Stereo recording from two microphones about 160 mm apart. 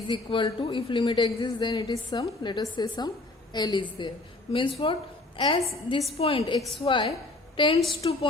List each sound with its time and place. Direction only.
0.1 s a woman's voice: 30° left (ahead or behind)